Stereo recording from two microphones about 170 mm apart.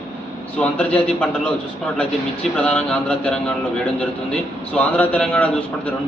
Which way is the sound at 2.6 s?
5° left (ahead or behind).